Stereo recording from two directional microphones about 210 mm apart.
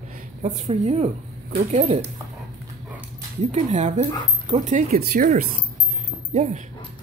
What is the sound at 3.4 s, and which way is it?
Speech, 35° right (ahead or behind).